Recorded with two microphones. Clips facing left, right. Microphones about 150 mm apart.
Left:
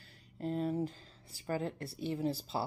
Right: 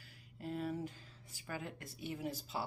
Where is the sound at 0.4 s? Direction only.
35° left (ahead or behind).